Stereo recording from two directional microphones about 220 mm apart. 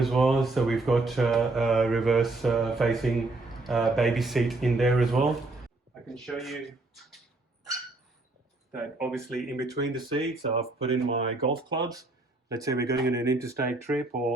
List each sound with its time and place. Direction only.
0.0 s speech: centre (ahead or behind)
6.2 s speech: centre (ahead or behind)
9.0 s speech: centre (ahead or behind)
9.6 s speech: 20° right (ahead or behind)
11.7 s speech: 15° right (ahead or behind)